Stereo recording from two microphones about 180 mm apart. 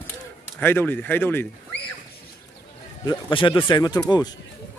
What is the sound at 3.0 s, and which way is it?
Speech, 25° left (ahead or behind).